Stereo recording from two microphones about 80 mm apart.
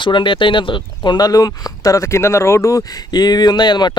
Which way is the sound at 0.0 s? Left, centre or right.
Left.